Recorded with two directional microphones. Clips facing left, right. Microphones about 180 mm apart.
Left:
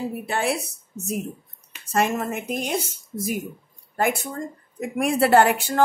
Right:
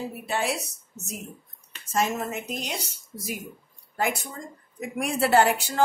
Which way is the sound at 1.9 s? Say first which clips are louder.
Left 3 dB; 55° left (ahead or behind).